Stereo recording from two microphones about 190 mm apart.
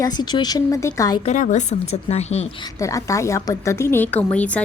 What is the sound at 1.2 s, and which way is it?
A woman's voice, 40° left (ahead or behind).